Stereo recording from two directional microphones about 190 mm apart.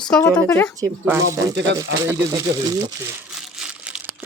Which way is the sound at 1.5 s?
70° right (ahead or behind).